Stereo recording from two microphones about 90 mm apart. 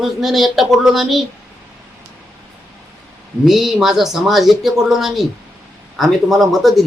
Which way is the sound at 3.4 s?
5° right (ahead or behind).